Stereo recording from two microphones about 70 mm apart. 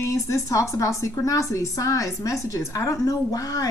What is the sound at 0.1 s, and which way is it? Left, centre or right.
A woman's voice, left.